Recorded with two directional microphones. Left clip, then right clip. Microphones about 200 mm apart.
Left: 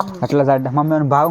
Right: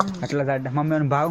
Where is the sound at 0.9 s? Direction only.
10° left (ahead or behind).